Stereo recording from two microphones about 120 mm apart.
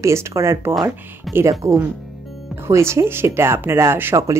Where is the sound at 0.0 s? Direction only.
25° right (ahead or behind).